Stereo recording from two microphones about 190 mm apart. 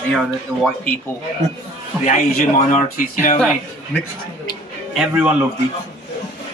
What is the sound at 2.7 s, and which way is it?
Speech, 40° left (ahead or behind).